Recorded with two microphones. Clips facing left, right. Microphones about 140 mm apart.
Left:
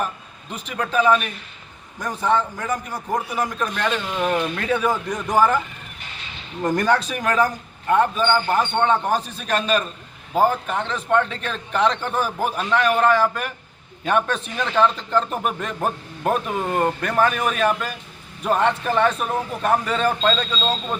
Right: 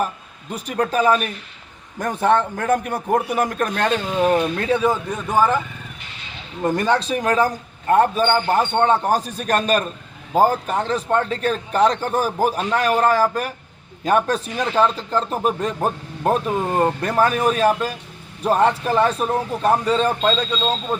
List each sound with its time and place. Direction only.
0.5 s a man's voice: 40° right (ahead or behind)
2.0 s a man's voice: 55° right (ahead or behind)
3.9 s a man's voice: 30° right (ahead or behind)
5.1 s a man's voice: 10° right (ahead or behind)
6.6 s a man's voice: 10° right (ahead or behind)
7.1 s a man's voice: 30° right (ahead or behind)